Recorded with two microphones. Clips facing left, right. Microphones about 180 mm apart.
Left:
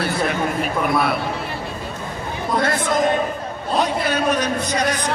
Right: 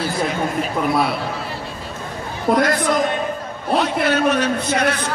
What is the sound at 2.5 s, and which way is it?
Speech, 60° right (ahead or behind).